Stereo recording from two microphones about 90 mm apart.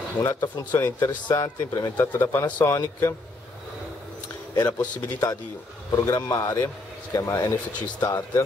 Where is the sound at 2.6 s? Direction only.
35° left (ahead or behind).